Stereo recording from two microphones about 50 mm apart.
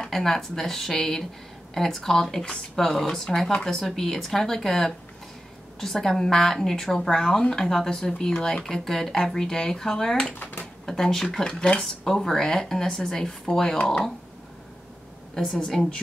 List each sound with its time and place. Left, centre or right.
0.0 s speech: centre
15.3 s speech: centre